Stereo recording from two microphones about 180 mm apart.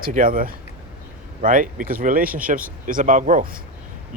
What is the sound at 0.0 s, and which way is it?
Speech, 50° right (ahead or behind).